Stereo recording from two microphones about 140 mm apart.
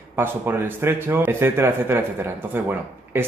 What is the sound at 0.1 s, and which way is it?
Speech, 15° right (ahead or behind).